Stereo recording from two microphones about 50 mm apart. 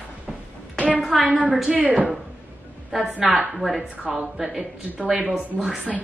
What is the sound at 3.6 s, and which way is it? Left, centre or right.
Speech, centre.